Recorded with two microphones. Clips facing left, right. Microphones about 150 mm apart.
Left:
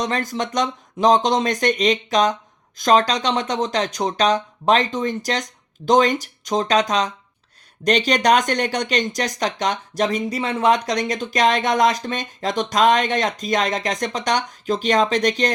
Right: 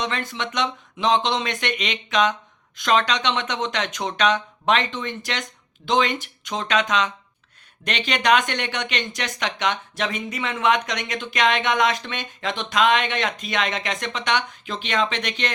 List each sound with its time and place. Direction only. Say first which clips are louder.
0.0 s speech: left 4 dB; 40° left (ahead or behind)